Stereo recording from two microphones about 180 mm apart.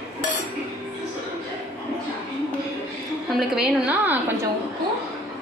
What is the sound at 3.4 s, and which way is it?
Speech, 5° right (ahead or behind).